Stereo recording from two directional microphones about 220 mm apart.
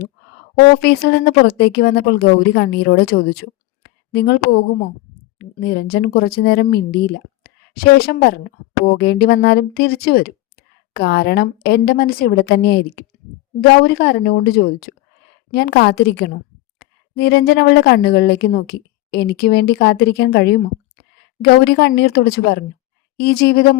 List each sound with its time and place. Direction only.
0.8 s a woman's voice: 45° left (ahead or behind)
3.8 s a sound: 50° left (ahead or behind)
5.4 s a woman's voice: 45° left (ahead or behind)